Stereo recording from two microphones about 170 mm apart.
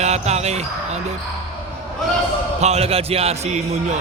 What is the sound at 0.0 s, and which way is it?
Speech, 40° right (ahead or behind).